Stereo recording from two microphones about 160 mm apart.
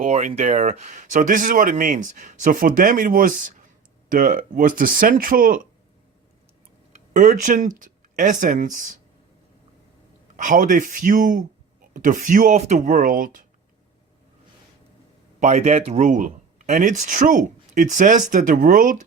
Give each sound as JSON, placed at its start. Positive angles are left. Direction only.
{"t": 0.0, "sound": "speech", "side_deg": -55}
{"t": 7.1, "sound": "speech", "side_deg": -55}
{"t": 10.3, "sound": "speech", "side_deg": -55}
{"t": 15.4, "sound": "speech", "side_deg": -45}